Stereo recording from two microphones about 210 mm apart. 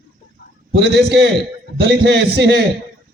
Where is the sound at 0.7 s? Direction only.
50° right (ahead or behind).